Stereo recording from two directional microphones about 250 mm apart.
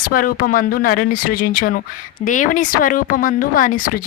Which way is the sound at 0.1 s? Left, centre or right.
Left.